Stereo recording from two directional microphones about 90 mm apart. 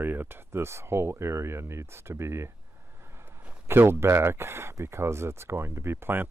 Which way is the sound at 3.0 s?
30° right (ahead or behind).